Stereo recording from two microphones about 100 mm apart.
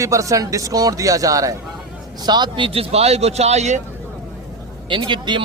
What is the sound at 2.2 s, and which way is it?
Speech, 45° right (ahead or behind).